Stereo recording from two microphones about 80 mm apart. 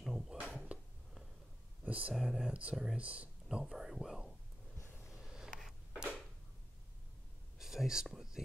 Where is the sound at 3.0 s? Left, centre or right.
Centre.